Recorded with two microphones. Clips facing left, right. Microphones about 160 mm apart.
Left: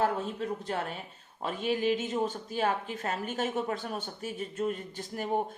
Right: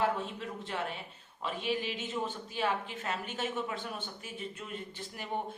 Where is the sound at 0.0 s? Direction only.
40° left (ahead or behind).